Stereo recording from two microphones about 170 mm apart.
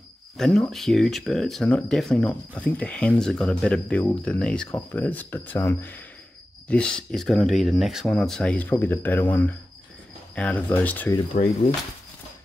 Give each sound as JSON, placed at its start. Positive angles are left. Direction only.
{"t": 0.4, "sound": "speech", "side_deg": 0}
{"t": 11.4, "sound": "speech", "side_deg": 55}